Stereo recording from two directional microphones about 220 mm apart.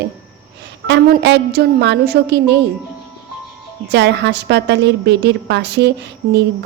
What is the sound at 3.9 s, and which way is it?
A woman's voice, 50° right (ahead or behind).